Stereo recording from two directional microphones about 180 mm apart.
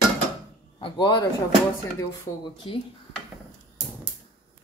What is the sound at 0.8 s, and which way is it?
Speech, 25° left (ahead or behind).